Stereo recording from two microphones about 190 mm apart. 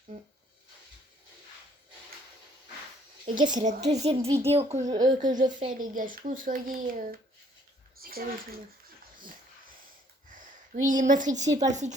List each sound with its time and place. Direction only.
3.3 s a woman's voice: 25° right (ahead or behind)
3.6 s a woman's voice: 35° right (ahead or behind)
4.9 s a woman's voice: 20° right (ahead or behind)
5.2 s a child's voice: 40° right (ahead or behind)
8.0 s bathtub: 50° right (ahead or behind)
10.8 s a woman's voice: 40° right (ahead or behind)
11.4 s speech: 15° right (ahead or behind)
11.7 s a woman's voice: 40° right (ahead or behind)